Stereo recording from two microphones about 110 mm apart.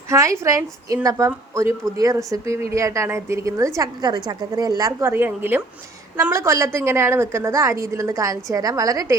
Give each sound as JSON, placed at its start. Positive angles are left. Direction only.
{"t": 0.1, "sound": "a woman's voice", "side_deg": -30}
{"t": 3.8, "sound": "a woman's voice", "side_deg": -40}